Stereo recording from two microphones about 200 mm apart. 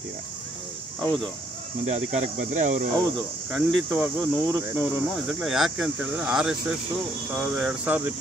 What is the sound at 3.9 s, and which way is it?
Speech, centre (ahead or behind).